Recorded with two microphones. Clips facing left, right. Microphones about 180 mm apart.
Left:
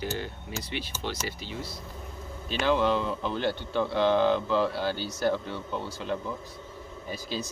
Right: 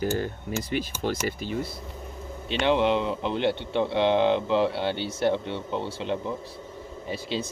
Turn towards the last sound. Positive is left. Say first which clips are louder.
# right 4 dB
turn(degrees=-30)  # may be behind; listen again after turning